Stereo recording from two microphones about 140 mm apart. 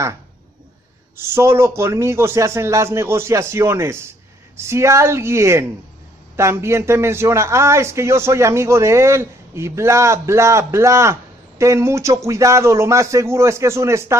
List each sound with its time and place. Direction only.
1.1 s a man's voice: 15° right (ahead or behind)